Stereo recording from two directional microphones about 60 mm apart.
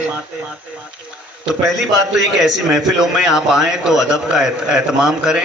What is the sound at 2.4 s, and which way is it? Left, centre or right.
A man's voice, centre.